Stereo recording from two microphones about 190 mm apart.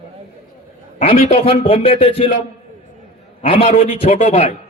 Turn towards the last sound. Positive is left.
turn(degrees=30)  # may be behind; listen again after turning